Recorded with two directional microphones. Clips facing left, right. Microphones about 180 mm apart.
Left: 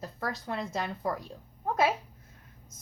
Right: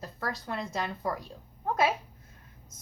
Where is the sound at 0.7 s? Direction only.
5° left (ahead or behind).